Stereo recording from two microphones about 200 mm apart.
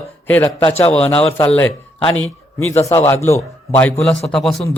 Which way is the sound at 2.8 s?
15° left (ahead or behind).